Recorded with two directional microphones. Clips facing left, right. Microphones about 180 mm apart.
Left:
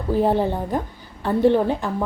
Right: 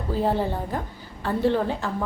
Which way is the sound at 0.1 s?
15° left (ahead or behind).